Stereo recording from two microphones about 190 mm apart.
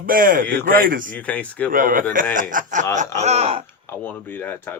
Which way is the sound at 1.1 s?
10° left (ahead or behind).